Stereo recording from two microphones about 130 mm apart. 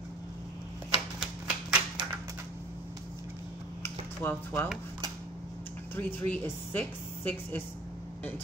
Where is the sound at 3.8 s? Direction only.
15° left (ahead or behind).